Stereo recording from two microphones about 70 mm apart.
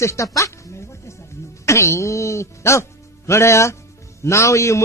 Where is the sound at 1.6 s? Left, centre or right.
Left.